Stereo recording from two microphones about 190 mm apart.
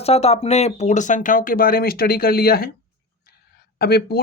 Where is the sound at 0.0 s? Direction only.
30° left (ahead or behind); by 2.6 s 55° left (ahead or behind).